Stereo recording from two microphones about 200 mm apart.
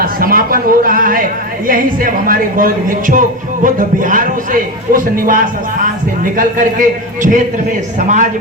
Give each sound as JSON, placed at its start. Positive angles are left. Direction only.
{"t": 0.0, "sound": "a woman's voice", "side_deg": -45}